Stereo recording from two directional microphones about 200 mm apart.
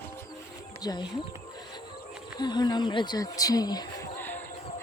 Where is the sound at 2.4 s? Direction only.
20° left (ahead or behind).